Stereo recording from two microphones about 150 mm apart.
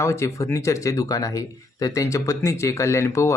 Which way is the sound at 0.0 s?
20° left (ahead or behind).